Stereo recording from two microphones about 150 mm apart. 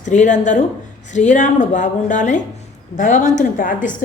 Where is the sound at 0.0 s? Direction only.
55° left (ahead or behind).